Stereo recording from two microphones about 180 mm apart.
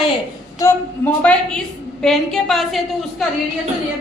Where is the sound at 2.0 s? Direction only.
Centre (ahead or behind).